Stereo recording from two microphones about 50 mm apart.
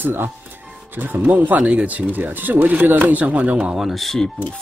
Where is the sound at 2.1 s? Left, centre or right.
Right.